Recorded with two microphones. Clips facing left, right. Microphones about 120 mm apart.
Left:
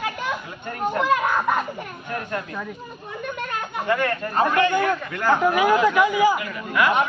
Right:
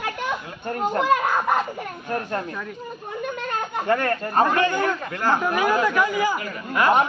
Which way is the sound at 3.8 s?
40° right (ahead or behind).